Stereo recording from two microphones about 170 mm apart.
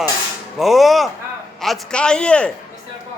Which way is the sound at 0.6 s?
Centre (ahead or behind).